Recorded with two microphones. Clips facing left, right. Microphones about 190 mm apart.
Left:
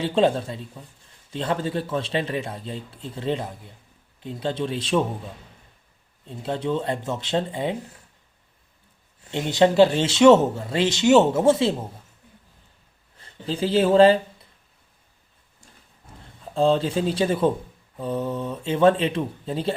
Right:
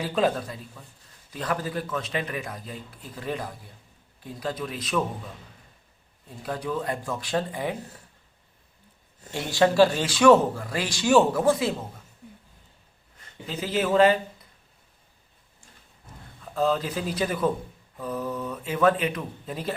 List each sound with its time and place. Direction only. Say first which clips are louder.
0.0 s speech: left 4 dB; 25° left (ahead or behind)
6.2 s speech: left 5 dB; 25° left (ahead or behind)
9.3 s speech: left 3 dB; 20° left (ahead or behind)
13.1 s speech: left 6 dB; 30° left (ahead or behind)
16.4 s speech: left 5 dB; 30° left (ahead or behind)